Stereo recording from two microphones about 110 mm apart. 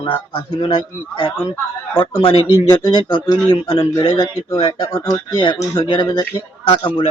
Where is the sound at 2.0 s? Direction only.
55° left (ahead or behind).